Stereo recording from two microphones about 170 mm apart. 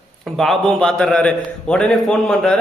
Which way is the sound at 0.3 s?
5° left (ahead or behind).